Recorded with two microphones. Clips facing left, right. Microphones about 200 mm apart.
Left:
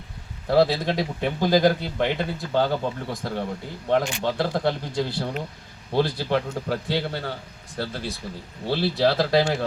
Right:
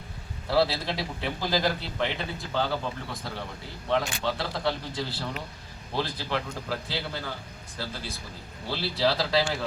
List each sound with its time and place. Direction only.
0.4 s a man's voice: 50° left (ahead or behind)
8.7 s a man's voice: 50° left (ahead or behind)